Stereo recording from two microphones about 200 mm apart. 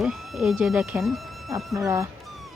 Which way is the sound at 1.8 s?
15° right (ahead or behind).